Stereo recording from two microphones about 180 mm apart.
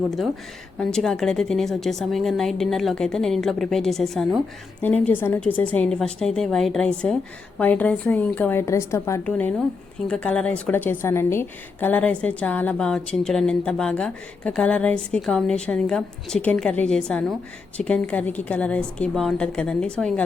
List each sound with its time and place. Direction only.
0.8 s a woman's voice: 5° left (ahead or behind)